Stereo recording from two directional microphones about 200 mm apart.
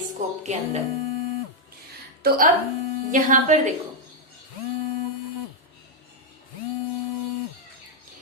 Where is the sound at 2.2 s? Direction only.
45° right (ahead or behind).